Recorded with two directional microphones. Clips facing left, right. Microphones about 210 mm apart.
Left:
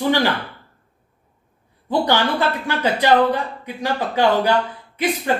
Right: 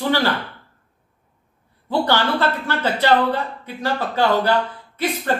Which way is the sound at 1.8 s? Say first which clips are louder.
Left 1 dB; 15° left (ahead or behind).